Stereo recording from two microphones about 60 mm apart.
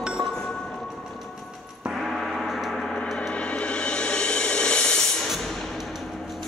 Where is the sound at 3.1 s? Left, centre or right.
Centre.